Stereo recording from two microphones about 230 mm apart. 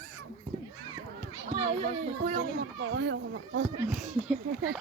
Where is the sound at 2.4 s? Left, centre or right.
Right.